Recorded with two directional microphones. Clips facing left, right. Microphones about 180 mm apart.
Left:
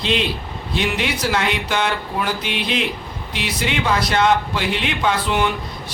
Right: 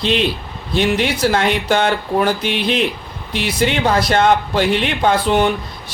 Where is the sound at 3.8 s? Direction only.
45° right (ahead or behind).